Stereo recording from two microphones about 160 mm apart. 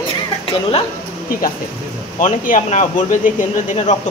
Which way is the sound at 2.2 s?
55° left (ahead or behind).